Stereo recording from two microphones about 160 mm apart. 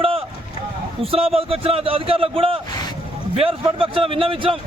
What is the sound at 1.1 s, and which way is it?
A man's voice, 35° right (ahead or behind).